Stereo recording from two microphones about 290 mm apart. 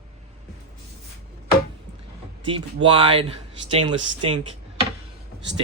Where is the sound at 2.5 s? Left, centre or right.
Centre.